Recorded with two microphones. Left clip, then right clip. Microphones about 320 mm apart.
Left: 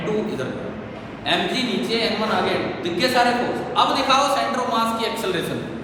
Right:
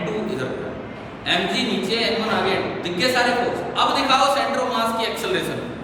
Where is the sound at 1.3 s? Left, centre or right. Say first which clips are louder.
Even; centre.